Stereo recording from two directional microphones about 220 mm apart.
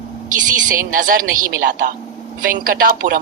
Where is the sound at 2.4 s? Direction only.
40° right (ahead or behind).